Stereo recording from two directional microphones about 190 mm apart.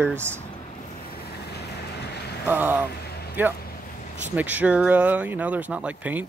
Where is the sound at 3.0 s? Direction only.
55° left (ahead or behind).